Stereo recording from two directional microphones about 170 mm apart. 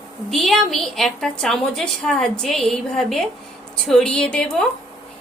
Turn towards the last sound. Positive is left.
turn(degrees=5)  # may be behind; listen again after turning